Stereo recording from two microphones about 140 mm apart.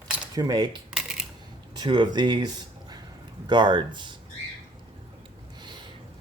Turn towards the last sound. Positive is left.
turn(degrees=-30)  # may be behind; listen again after turning